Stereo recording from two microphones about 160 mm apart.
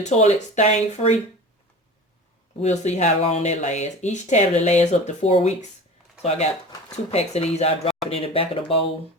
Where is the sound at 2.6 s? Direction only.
45° left (ahead or behind).